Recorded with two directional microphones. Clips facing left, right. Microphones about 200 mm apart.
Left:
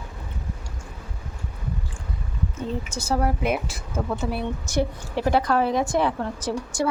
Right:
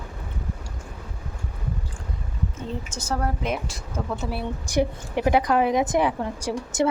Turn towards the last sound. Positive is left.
turn(degrees=-20)  # may be behind; listen again after turning